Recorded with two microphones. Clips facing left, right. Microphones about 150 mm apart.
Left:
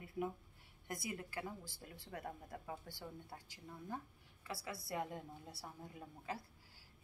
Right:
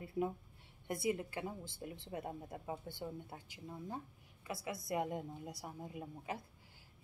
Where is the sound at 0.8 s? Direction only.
25° right (ahead or behind).